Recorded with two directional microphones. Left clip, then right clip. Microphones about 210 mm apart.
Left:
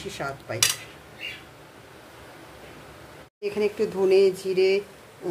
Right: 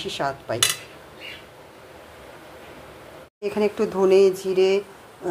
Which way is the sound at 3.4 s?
15° right (ahead or behind).